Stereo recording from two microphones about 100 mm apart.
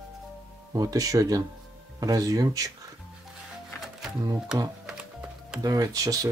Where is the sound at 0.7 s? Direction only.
35° right (ahead or behind).